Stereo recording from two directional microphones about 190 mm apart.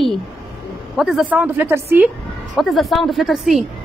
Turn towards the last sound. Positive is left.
turn(degrees=0)  # may be behind; listen again after turning